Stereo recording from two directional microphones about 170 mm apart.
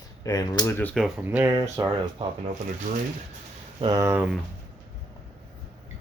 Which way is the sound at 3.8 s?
20° right (ahead or behind).